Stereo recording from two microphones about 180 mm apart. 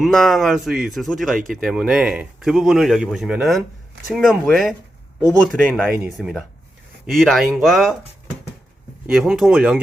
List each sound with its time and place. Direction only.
0.0 s speech: centre (ahead or behind)
9.0 s speech: 5° right (ahead or behind)